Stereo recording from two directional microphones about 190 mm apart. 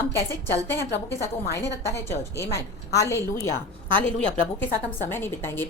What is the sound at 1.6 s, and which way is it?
A woman's voice, 15° left (ahead or behind).